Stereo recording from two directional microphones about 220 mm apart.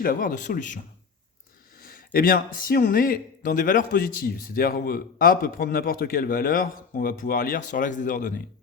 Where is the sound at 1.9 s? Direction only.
40° left (ahead or behind).